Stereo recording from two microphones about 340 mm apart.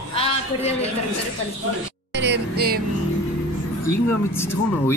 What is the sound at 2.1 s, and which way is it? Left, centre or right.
Music, right.